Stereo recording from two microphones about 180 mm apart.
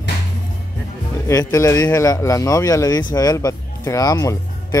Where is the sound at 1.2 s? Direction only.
20° left (ahead or behind).